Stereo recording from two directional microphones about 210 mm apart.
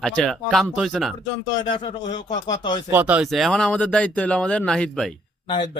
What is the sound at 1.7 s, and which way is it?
Speech, 20° left (ahead or behind).